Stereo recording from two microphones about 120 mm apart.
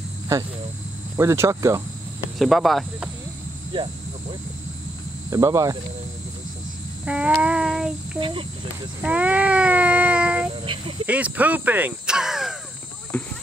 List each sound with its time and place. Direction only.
1.1 s speech: 20° right (ahead or behind)
2.3 s speech: centre (ahead or behind)
3.7 s cricket: 45° right (ahead or behind)
5.3 s speech: 25° right (ahead or behind)
7.1 s speech: 10° right (ahead or behind)
8.2 s speech: 45° right (ahead or behind)
9.0 s a sound: 10° right (ahead or behind)
10.6 s speech: 45° right (ahead or behind)
11.1 s speech: 10° right (ahead or behind)
13.1 s cricket: 10° left (ahead or behind)